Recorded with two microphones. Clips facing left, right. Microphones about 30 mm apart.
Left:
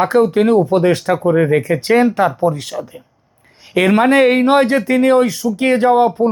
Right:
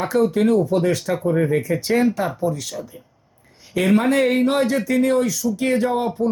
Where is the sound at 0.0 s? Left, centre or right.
Left.